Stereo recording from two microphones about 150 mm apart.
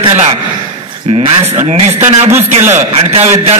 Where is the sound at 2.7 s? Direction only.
45° right (ahead or behind).